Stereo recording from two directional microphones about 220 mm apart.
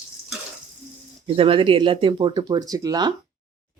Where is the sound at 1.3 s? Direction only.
25° right (ahead or behind).